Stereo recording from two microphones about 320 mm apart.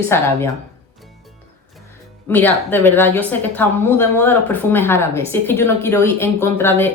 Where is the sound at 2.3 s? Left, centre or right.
Centre.